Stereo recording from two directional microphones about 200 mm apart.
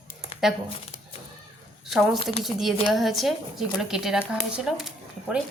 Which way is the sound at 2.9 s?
Centre (ahead or behind).